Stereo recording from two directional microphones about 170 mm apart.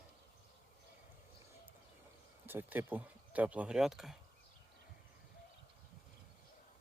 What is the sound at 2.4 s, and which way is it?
Speech, 10° right (ahead or behind).